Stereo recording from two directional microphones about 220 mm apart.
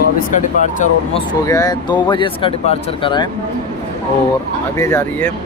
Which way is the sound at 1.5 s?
15° left (ahead or behind).